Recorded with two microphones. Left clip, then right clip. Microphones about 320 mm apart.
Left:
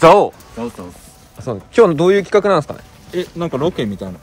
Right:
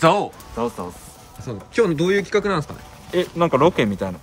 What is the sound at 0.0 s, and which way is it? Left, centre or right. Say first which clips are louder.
Speech: left 8 dB; centre.